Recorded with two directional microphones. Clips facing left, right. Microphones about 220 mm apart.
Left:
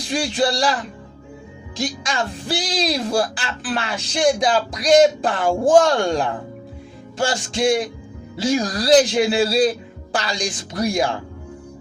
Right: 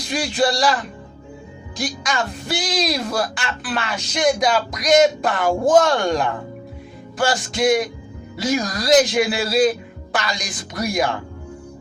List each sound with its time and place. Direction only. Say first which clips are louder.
0.1 s speech: even; 30° left (ahead or behind)
7.2 s music: right 1 dB; 30° left (ahead or behind)
8.4 s speech: left 2 dB; 30° left (ahead or behind)